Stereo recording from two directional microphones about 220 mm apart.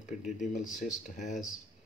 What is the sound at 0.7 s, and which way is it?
Speech, 35° left (ahead or behind).